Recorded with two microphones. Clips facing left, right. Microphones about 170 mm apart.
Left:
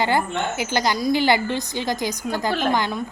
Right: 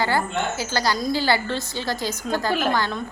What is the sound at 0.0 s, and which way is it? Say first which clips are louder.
A woman's voice: left 1 dB; 20° left (ahead or behind).